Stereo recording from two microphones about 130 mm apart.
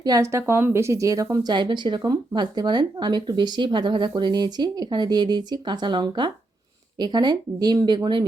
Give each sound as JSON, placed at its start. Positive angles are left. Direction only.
{"t": 0.0, "sound": "speech", "side_deg": -25}